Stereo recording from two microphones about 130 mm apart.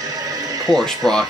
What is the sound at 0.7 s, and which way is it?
Speech, centre (ahead or behind).